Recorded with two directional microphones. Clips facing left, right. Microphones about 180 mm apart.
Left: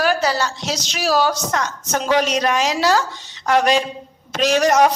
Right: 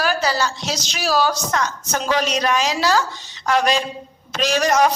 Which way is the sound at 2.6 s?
50° left (ahead or behind).